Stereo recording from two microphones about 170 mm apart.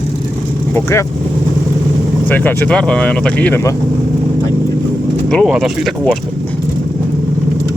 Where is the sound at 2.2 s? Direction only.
10° left (ahead or behind).